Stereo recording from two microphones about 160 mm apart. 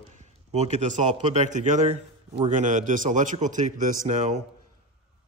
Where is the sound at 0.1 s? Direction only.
45° right (ahead or behind).